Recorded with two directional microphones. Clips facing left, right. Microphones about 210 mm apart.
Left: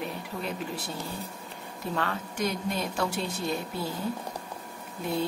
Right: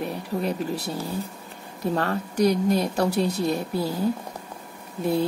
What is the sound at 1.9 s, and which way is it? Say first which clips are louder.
A woman's voice: right 6 dB; 40° right (ahead or behind).